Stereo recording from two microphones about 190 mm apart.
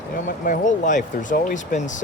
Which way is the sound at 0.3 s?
45° left (ahead or behind).